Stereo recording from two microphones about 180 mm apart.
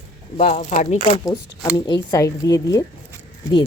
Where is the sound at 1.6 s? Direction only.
20° left (ahead or behind).